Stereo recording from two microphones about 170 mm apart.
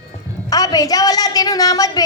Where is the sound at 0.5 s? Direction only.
20° left (ahead or behind).